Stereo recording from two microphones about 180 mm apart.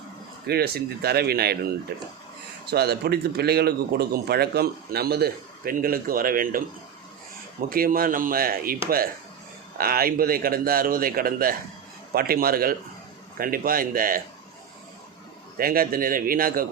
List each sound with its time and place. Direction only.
0.4 s speech: 60° right (ahead or behind)
7.7 s a man's voice: 55° right (ahead or behind)
9.7 s a man's voice: 55° right (ahead or behind)
15.5 s a man's voice: 55° right (ahead or behind)